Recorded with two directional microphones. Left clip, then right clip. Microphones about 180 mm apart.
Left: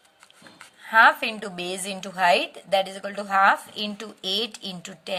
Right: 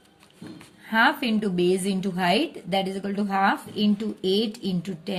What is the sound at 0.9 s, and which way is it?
A woman's voice, 25° left (ahead or behind).